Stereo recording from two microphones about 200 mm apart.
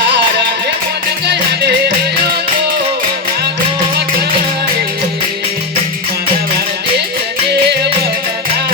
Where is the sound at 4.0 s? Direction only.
50° right (ahead or behind).